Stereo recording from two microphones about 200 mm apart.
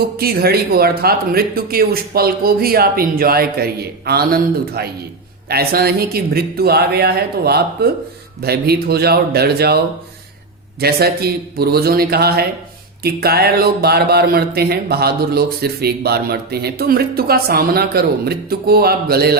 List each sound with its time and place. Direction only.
0.2 s speech: 50° right (ahead or behind)